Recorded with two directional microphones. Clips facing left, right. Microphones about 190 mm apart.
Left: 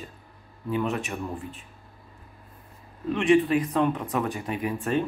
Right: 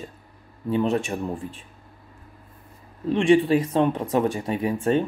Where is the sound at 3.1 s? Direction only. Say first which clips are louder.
Right 3 dB; 30° right (ahead or behind).